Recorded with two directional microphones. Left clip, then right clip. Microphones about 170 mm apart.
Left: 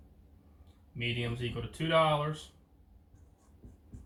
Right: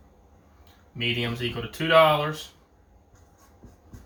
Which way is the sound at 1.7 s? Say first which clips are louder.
Right 9 dB; 20° right (ahead or behind).